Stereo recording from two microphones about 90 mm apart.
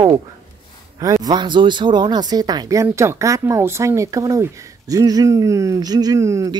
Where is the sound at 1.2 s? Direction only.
60° right (ahead or behind).